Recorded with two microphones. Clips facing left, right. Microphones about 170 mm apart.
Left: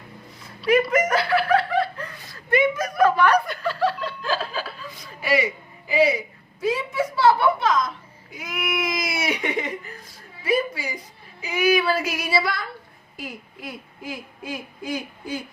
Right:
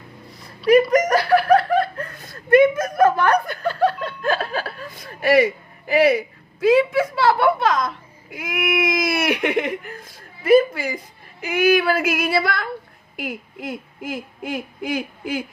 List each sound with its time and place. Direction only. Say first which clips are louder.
0.9 s speech: right 4 dB; 40° right (ahead or behind); by 15.4 s 60° right (ahead or behind)